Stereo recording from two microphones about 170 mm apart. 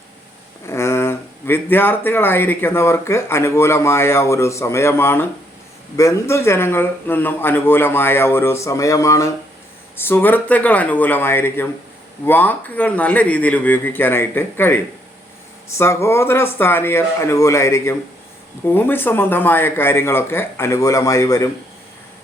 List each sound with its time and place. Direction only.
0.7 s speech: 15° left (ahead or behind)
15.8 s speech: 15° left (ahead or behind)